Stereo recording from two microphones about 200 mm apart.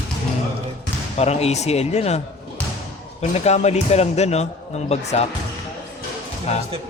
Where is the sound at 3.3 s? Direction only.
35° left (ahead or behind).